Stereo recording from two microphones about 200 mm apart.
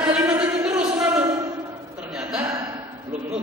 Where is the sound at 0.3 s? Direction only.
5° right (ahead or behind).